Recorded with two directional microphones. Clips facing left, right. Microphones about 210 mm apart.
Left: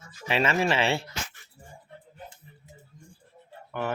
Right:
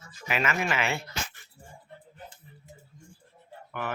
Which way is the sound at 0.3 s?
30° left (ahead or behind).